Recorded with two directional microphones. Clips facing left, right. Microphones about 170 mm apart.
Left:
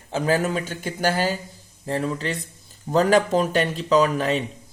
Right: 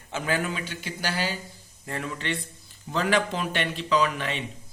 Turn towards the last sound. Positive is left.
turn(degrees=40)  # may be behind; listen again after turning